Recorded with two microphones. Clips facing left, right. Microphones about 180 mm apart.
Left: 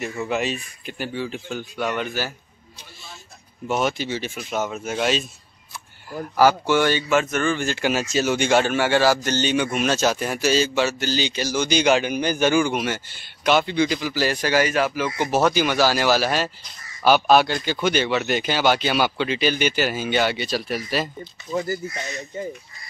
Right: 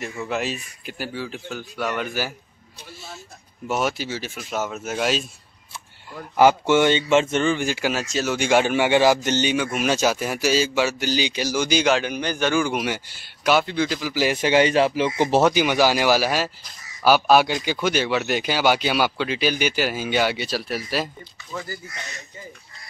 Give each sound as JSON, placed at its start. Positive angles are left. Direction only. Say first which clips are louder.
{"t": 0.0, "sound": "a man's voice", "louder": "left 2 dB", "side_deg": 0}
{"t": 3.6, "sound": "speech", "louder": "left 1 dB", "side_deg": -5}
{"t": 6.3, "sound": "speech", "louder": "right 2 dB", "side_deg": -20}
{"t": 7.9, "sound": "speech", "louder": "left 3 dB", "side_deg": 0}
{"t": 8.5, "sound": "a man's voice", "louder": "right 4 dB", "side_deg": -15}
{"t": 11.9, "sound": "a man's voice", "louder": "left 2 dB", "side_deg": 5}
{"t": 12.6, "sound": "speech", "louder": "left 1 dB", "side_deg": -10}
{"t": 14.1, "sound": "speech", "louder": "right 5 dB", "side_deg": -15}
{"t": 15.5, "sound": "a man's voice", "louder": "right 1 dB", "side_deg": -15}